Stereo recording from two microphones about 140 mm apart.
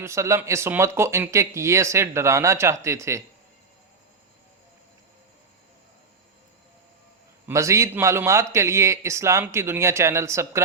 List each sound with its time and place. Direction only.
0.0 s speech: 20° right (ahead or behind)
7.4 s speech: 20° right (ahead or behind)